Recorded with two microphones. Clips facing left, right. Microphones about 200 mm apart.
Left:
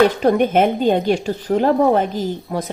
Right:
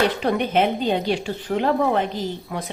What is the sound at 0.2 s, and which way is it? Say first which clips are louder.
Speech: left 6 dB; 45° left (ahead or behind).